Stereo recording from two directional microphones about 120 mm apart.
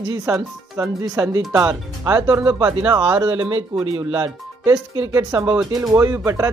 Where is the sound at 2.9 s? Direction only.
40° right (ahead or behind).